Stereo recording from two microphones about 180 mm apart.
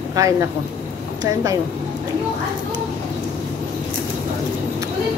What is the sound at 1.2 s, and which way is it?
Speech, 20° right (ahead or behind).